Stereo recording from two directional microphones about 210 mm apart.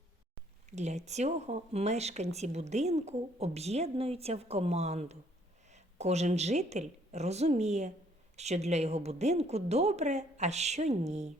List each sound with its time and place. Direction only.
0.8 s speech: 30° right (ahead or behind)